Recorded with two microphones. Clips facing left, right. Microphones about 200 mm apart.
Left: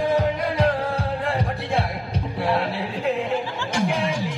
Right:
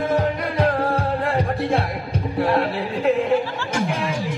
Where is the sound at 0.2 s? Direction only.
50° right (ahead or behind).